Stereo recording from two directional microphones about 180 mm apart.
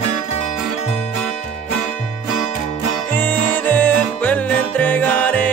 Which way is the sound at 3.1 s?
10° left (ahead or behind).